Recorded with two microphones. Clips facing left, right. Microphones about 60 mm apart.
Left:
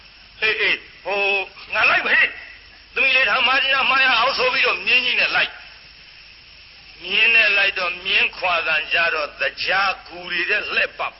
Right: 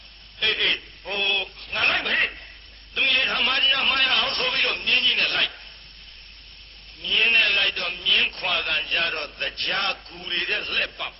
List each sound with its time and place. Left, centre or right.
0.3 s speech: left
2.9 s a sound: left
3.2 s a man's voice: left
7.0 s a man's voice: left